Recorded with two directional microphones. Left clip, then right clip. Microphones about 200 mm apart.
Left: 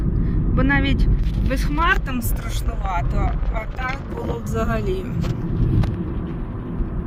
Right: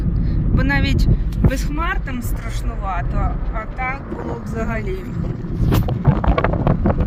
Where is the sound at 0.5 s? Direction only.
15° left (ahead or behind).